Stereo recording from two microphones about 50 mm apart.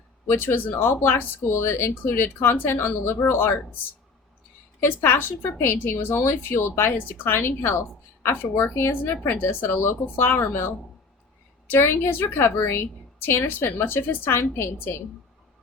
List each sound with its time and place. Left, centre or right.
0.3 s a woman's voice: left
5.0 s a woman's voice: left
7.3 s a woman's voice: left
8.7 s a woman's voice: left